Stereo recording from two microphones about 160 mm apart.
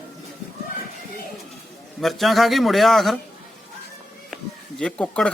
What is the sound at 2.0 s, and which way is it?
A man's voice, centre (ahead or behind).